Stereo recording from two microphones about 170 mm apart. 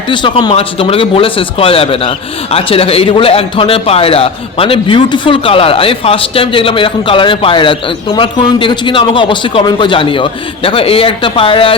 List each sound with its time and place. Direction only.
0.1 s speech: 30° left (ahead or behind)